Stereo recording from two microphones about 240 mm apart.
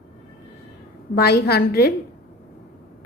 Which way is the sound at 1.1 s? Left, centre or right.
Left.